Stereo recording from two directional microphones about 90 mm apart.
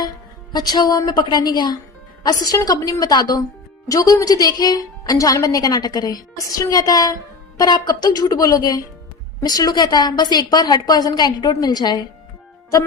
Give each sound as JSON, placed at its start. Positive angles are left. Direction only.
{"t": 0.5, "sound": "a woman's voice", "side_deg": 50}